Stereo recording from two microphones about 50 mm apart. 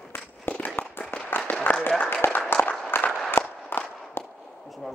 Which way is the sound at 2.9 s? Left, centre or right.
Left.